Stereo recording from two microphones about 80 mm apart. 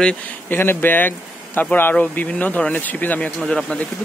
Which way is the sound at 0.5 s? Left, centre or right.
Left.